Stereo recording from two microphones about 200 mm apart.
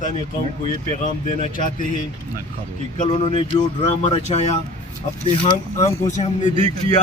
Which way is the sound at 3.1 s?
25° left (ahead or behind).